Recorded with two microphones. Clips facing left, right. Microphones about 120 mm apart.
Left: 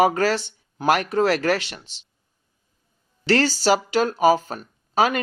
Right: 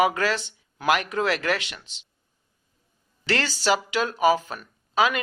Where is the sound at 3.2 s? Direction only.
35° left (ahead or behind).